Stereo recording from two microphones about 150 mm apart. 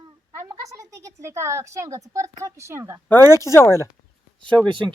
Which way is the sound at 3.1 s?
20° left (ahead or behind).